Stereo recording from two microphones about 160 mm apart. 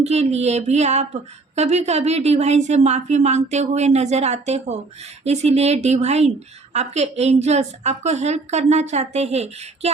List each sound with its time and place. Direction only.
0.0 s a woman's voice: 40° right (ahead or behind)